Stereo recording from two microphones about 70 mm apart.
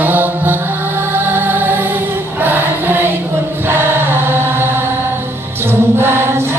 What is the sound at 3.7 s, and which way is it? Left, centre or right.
Chant, right.